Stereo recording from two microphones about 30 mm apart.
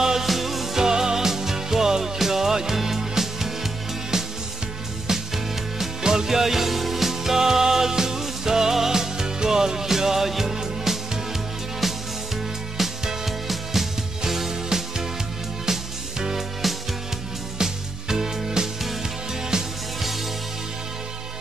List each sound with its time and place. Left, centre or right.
0.0 s music: centre
0.3 s music: centre
0.8 s music: right
11.8 s music: centre
17.6 s music: centre